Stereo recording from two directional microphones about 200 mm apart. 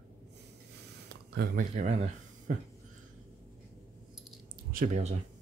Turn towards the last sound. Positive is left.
turn(degrees=-35)  # may be behind; listen again after turning